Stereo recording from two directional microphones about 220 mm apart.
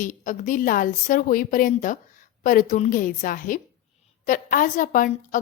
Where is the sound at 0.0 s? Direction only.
35° left (ahead or behind).